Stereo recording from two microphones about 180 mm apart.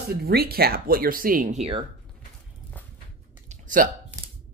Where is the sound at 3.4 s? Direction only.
45° right (ahead or behind).